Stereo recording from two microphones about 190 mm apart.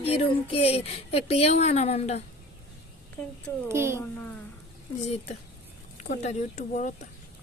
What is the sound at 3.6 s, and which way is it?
Speech, 15° right (ahead or behind).